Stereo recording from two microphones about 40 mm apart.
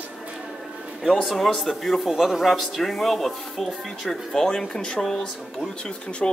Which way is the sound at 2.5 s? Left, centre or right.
Centre.